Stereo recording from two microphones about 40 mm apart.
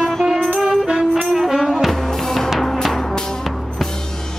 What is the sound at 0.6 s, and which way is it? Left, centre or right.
Music, centre.